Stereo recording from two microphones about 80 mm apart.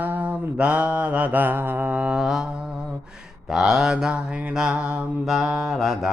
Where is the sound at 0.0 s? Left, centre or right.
Right; by 2.5 s centre.